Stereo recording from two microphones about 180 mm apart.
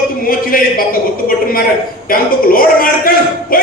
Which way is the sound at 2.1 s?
55° left (ahead or behind).